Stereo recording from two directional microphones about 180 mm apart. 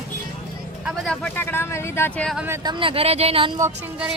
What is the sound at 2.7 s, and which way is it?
Speech, 30° right (ahead or behind).